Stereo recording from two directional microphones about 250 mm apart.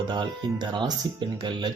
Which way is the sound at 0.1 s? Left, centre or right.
Centre.